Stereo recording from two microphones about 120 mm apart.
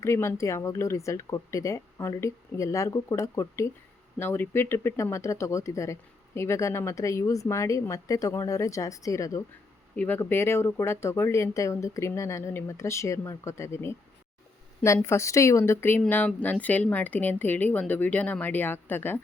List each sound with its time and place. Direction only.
0.0 s speech: 25° left (ahead or behind)
9.9 s speech: 10° left (ahead or behind)
15.0 s speech: 25° left (ahead or behind)